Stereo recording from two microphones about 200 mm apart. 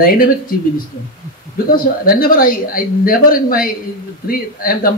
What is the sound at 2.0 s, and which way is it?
Speech, 45° left (ahead or behind).